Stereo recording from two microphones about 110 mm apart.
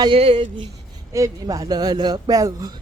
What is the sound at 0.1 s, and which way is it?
Speech, 60° right (ahead or behind).